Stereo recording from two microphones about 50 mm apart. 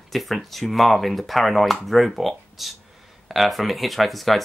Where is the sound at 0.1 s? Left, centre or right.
Centre.